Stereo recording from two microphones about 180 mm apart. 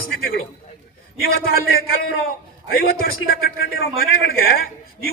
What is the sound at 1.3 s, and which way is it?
Speech, 55° left (ahead or behind).